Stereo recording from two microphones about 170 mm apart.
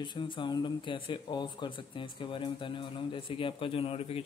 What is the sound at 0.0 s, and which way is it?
Speech, 25° left (ahead or behind).